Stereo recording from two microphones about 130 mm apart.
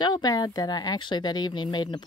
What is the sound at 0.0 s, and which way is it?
Speech, 30° left (ahead or behind).